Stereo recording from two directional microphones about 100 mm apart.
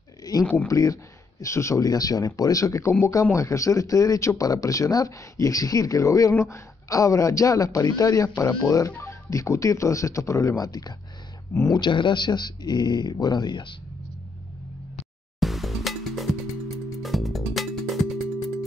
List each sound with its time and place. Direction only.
0.3 s a sound: 40° left (ahead or behind)
0.7 s speech: 35° left (ahead or behind); by 13.7 s 50° left (ahead or behind)
15.4 s music: centre (ahead or behind)